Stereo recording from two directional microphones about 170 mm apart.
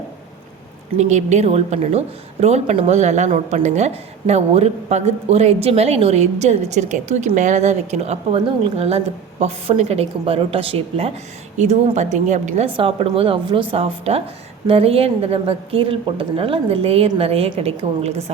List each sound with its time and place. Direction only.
0.9 s a woman's voice: 40° right (ahead or behind)
12.7 s a woman's voice: 35° right (ahead or behind)